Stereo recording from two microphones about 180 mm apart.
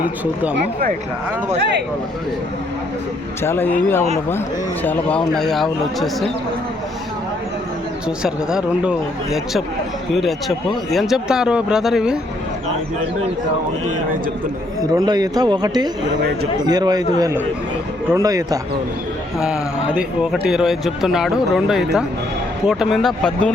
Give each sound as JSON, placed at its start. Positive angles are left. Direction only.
{"t": 0.5, "sound": "speech", "side_deg": -55}
{"t": 3.4, "sound": "speech", "side_deg": 10}
{"t": 8.0, "sound": "speech", "side_deg": -5}
{"t": 14.9, "sound": "speech", "side_deg": -20}
{"t": 19.4, "sound": "speech", "side_deg": -5}